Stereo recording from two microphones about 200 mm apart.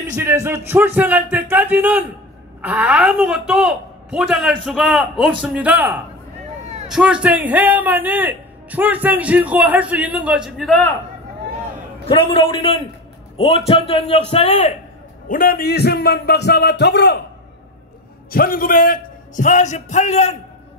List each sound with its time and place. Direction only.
0.1 s a woman's voice: 15° right (ahead or behind)
12.1 s a man's voice: 30° left (ahead or behind)
15.2 s a man's voice: 45° left (ahead or behind)
18.3 s a man's voice: 45° left (ahead or behind)